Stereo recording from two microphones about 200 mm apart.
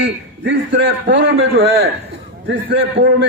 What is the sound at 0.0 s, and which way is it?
A man's voice, 55° right (ahead or behind).